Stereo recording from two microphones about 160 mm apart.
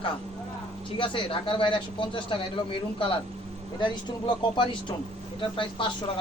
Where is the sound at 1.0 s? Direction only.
30° left (ahead or behind).